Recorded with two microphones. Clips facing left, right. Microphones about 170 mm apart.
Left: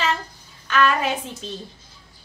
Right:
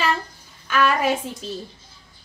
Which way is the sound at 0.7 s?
10° right (ahead or behind).